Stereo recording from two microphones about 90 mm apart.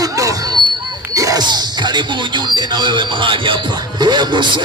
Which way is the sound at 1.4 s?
55° right (ahead or behind).